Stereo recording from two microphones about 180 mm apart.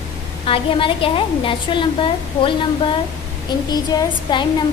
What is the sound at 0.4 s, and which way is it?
A woman's voice, 30° left (ahead or behind).